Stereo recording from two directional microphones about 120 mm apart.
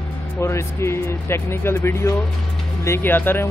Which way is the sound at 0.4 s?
25° left (ahead or behind).